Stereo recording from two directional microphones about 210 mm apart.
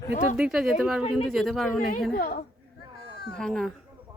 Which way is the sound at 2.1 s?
45° left (ahead or behind).